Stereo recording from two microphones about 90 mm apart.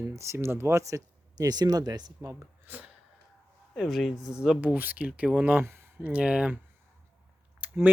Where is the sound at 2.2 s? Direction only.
25° right (ahead or behind).